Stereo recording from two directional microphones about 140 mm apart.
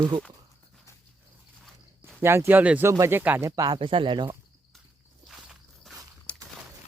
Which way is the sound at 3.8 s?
40° right (ahead or behind).